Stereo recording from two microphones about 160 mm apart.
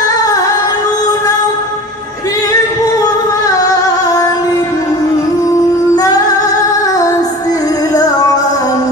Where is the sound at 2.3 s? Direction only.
20° left (ahead or behind).